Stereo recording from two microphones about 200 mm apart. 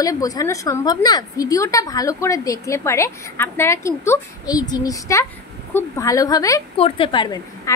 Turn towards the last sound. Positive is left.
turn(degrees=20)  # may be behind; listen again after turning